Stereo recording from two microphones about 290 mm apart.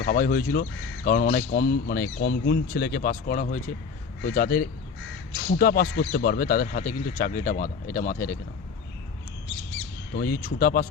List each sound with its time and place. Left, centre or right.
0.0 s speech: left
10.2 s speech: left